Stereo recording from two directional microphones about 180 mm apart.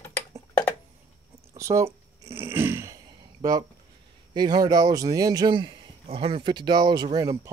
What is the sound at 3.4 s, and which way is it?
A man's voice, 20° right (ahead or behind).